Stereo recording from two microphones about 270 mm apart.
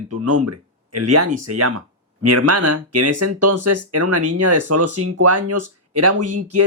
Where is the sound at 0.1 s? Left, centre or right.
Right.